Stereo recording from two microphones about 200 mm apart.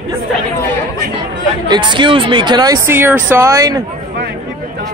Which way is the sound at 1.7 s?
25° right (ahead or behind).